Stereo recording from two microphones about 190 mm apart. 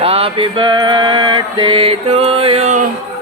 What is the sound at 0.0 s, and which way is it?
Mantra, 30° right (ahead or behind).